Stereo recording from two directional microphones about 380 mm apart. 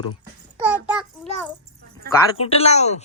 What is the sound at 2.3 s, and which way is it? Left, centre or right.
Speech, centre.